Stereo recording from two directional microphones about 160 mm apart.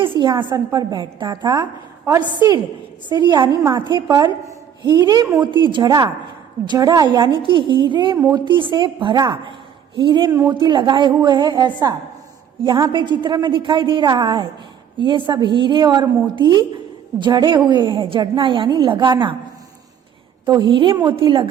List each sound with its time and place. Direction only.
0.2 s a woman's voice: 30° right (ahead or behind)
20.4 s a woman's voice: 30° right (ahead or behind)